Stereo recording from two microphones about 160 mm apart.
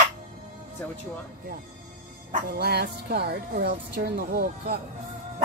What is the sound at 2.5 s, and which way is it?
A woman's voice, 85° right.